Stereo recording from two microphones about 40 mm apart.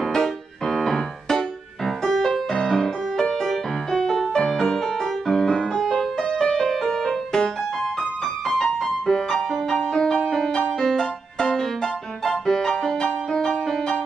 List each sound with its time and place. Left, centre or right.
0.1 s piano: centre
2.0 s music: centre
9.0 s music: centre